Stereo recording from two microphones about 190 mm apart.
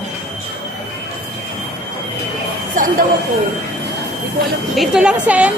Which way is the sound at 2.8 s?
45° right (ahead or behind).